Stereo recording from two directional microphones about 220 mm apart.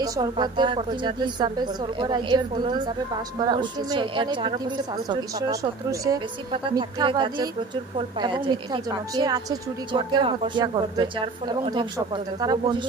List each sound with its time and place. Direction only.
0.0 s a woman's voice: 20° right (ahead or behind)